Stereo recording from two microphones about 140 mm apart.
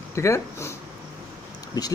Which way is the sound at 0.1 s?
20° left (ahead or behind).